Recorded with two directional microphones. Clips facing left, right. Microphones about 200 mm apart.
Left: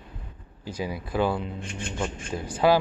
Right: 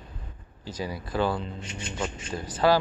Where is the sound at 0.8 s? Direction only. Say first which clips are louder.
Left 2 dB; 10° left (ahead or behind).